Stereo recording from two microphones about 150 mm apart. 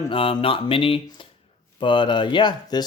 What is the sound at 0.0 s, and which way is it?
Speech, 35° left (ahead or behind).